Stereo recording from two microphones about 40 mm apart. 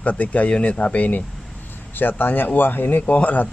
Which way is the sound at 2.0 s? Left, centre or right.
Left.